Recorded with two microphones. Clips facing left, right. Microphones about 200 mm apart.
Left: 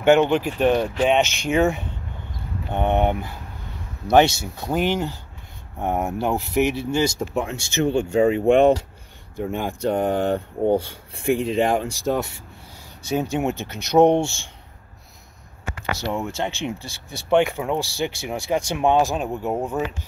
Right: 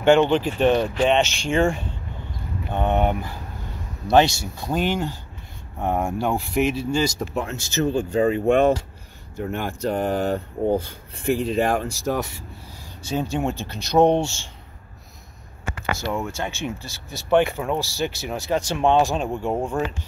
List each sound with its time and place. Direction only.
0.0 s speech: 10° left (ahead or behind)
2.7 s speech: 20° left (ahead or behind)
13.1 s speech: 10° left (ahead or behind)
16.0 s speech: 15° left (ahead or behind)